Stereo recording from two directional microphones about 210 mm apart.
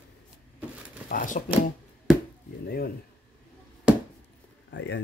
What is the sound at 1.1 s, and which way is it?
Speech, 40° left (ahead or behind).